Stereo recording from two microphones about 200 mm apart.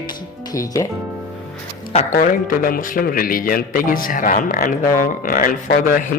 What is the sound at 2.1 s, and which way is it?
A man's voice, 45° left (ahead or behind).